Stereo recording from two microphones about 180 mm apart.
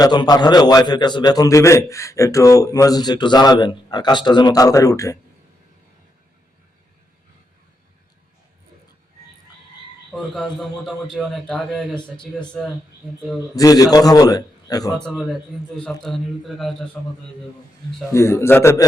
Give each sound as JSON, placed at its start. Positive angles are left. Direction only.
{"t": 0.0, "sound": "a man's voice", "side_deg": 25}
{"t": 10.1, "sound": "a man's voice", "side_deg": 0}
{"t": 13.6, "sound": "a man's voice", "side_deg": 20}
{"t": 14.9, "sound": "a man's voice", "side_deg": 0}
{"t": 18.1, "sound": "a man's voice", "side_deg": 15}